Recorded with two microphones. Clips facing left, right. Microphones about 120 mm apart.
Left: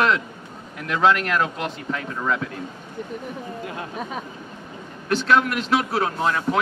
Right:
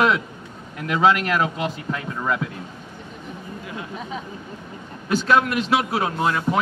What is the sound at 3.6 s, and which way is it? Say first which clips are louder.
Speech: left 1 dB; 50° left (ahead or behind).